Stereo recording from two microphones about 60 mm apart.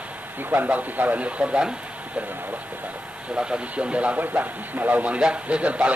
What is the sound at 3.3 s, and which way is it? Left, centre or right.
A man's voice, centre.